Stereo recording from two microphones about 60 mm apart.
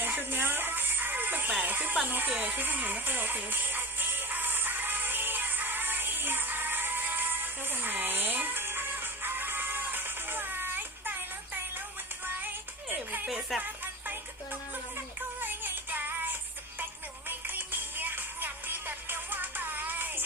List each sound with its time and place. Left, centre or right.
0.0 s music: right
2.0 s speech: right
2.3 s music: right
13.2 s music: centre
15.4 s music: right